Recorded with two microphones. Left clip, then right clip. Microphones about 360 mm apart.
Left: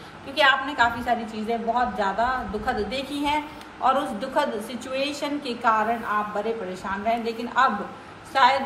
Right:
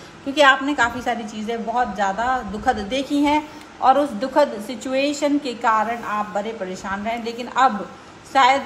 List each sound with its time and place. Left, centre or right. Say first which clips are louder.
0.3 s a woman's voice: right 5 dB; right